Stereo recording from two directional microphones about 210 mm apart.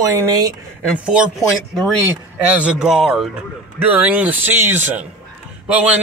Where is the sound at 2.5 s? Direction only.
5° right (ahead or behind).